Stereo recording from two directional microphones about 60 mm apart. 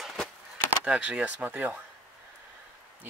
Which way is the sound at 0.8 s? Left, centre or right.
Centre.